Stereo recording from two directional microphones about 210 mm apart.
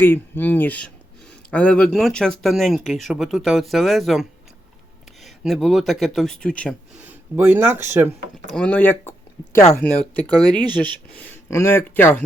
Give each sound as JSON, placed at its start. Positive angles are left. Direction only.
{"t": 0.0, "sound": "speech", "side_deg": 10}
{"t": 7.0, "sound": "speech", "side_deg": -10}
{"t": 8.4, "sound": "speech", "side_deg": 5}